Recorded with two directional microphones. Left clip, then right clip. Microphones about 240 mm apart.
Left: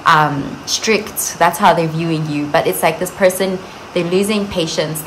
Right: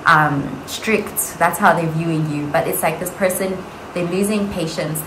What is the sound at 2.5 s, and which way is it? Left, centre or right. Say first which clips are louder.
A woman's voice: left 4 dB; left.